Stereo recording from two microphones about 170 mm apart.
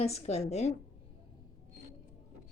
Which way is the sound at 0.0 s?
40° left (ahead or behind).